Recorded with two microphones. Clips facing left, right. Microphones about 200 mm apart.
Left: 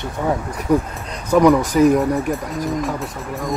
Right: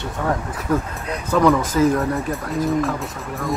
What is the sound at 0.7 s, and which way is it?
Speech, 15° left (ahead or behind).